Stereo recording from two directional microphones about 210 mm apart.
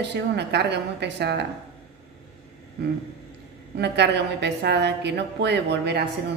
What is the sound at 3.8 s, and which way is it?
A woman's voice, 55° right (ahead or behind).